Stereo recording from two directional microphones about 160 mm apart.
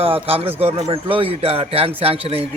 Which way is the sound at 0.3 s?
35° right (ahead or behind).